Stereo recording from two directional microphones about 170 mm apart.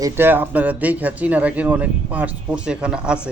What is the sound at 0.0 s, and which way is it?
A man's voice, 10° right (ahead or behind).